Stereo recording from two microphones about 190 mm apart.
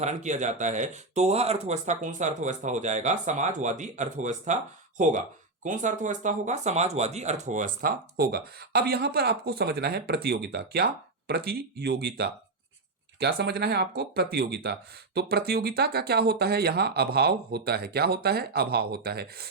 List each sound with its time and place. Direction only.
0.0 s speech: 40° right (ahead or behind); by 19.5 s 55° right (ahead or behind)